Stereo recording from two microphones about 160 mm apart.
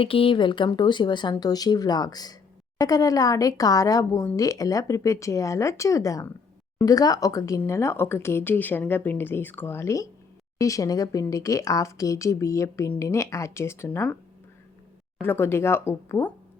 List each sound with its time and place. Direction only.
0.0 s speech: 35° left (ahead or behind); by 14.2 s 10° left (ahead or behind)
15.2 s speech: 15° left (ahead or behind)